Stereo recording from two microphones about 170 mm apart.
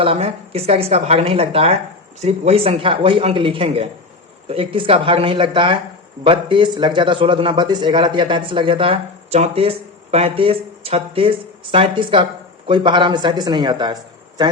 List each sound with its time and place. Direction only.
0.0 s a man's voice: 35° right (ahead or behind)